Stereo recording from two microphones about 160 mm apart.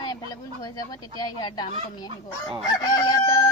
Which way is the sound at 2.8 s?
25° left (ahead or behind).